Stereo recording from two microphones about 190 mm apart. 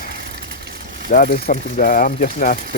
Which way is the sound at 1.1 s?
45° left (ahead or behind).